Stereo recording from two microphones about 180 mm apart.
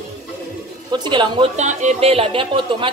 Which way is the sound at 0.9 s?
25° right (ahead or behind).